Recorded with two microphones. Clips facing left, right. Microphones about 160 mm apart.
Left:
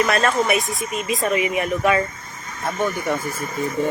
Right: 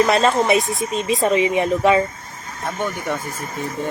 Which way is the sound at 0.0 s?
25° right (ahead or behind).